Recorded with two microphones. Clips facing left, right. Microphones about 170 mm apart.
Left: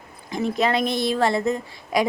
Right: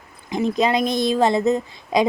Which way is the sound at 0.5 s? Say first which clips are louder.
Right 2 dB; 15° right (ahead or behind).